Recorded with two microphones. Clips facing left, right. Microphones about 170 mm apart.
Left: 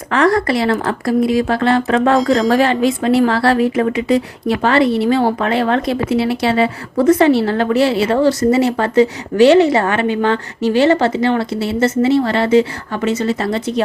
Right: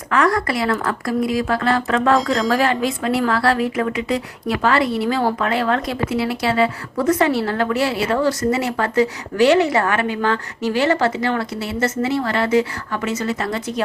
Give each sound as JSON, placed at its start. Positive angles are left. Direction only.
{"t": 0.1, "sound": "a woman's voice", "side_deg": 30}